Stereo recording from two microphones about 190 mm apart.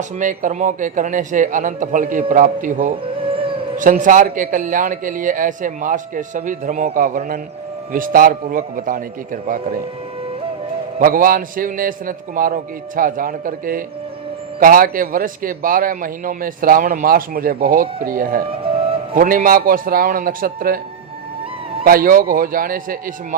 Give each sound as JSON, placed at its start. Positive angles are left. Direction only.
{"t": 0.2, "sound": "a man's voice", "side_deg": -40}
{"t": 3.0, "sound": "speech", "side_deg": -30}
{"t": 3.8, "sound": "a man's voice", "side_deg": -45}
{"t": 11.0, "sound": "a man's voice", "side_deg": -50}
{"t": 21.8, "sound": "a man's voice", "side_deg": -50}